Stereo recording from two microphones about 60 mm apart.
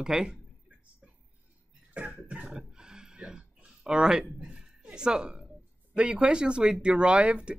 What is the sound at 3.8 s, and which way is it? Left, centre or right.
Speech, centre.